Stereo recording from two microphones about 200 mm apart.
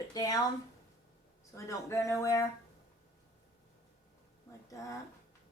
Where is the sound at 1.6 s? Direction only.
15° left (ahead or behind).